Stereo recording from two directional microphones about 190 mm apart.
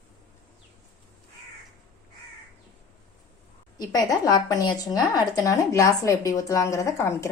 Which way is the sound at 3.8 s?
20° left (ahead or behind).